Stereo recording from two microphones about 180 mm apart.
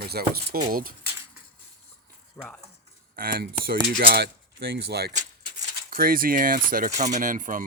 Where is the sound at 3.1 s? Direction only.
55° right (ahead or behind).